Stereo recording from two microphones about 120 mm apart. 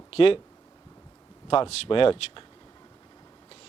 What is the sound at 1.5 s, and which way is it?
Speech, 50° left (ahead or behind).